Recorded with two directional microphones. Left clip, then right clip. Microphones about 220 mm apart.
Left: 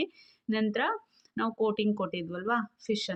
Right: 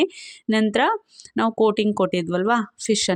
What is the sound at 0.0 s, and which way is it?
Speech, 50° right (ahead or behind).